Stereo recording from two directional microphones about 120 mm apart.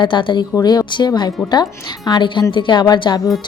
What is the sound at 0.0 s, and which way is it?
A woman's voice, 45° left (ahead or behind).